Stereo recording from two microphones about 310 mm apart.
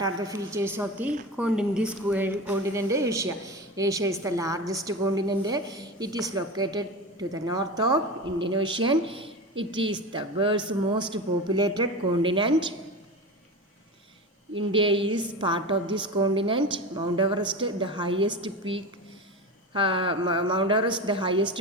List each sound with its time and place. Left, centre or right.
0.0 s a woman's voice: centre
14.5 s a woman's voice: centre